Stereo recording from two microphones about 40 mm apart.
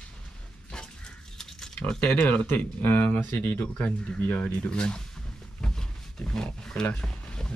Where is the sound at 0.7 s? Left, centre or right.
Left.